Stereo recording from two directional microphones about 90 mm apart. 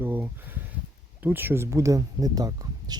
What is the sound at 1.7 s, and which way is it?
Speech, 35° right (ahead or behind).